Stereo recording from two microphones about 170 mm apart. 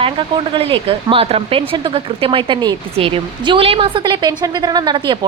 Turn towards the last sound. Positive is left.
turn(degrees=-30)  # may be behind; listen again after turning